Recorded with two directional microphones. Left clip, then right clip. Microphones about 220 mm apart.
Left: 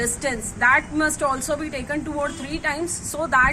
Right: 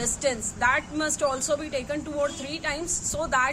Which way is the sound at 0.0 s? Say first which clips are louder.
Left 2 dB; 40° right (ahead or behind).